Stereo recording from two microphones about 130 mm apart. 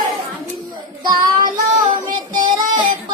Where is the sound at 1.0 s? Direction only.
35° right (ahead or behind).